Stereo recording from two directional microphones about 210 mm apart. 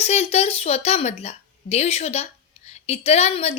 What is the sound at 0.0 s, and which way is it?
A woman's voice, 30° left (ahead or behind).